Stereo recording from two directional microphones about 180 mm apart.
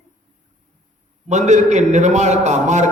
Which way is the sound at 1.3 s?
40° right (ahead or behind).